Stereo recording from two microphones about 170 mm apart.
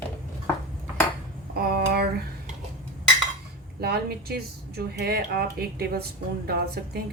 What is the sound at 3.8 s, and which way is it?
A woman's voice, 70° right (ahead or behind).